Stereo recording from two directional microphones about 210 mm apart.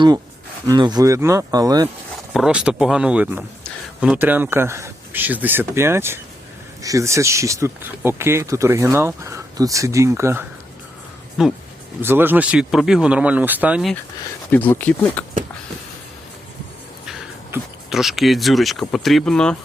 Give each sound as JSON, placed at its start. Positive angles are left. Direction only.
{"t": 0.7, "sound": "speech", "side_deg": -20}
{"t": 2.3, "sound": "speech", "side_deg": -5}
{"t": 11.4, "sound": "speech", "side_deg": 0}
{"t": 14.5, "sound": "speech", "side_deg": 10}
{"t": 17.1, "sound": "speech", "side_deg": 0}